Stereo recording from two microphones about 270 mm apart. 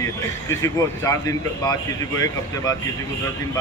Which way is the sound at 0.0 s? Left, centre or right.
Centre.